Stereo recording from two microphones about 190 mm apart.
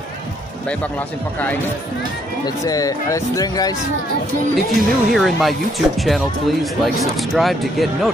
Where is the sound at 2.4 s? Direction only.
20° left (ahead or behind).